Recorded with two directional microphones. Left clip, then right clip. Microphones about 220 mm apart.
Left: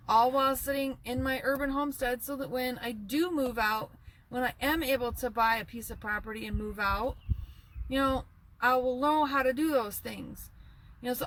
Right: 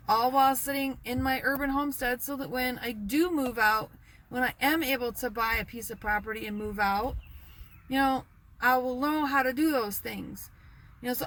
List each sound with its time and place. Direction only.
0.1 s speech: 5° right (ahead or behind)